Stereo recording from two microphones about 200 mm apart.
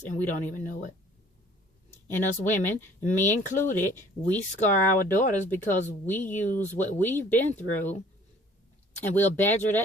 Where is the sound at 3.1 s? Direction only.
10° left (ahead or behind).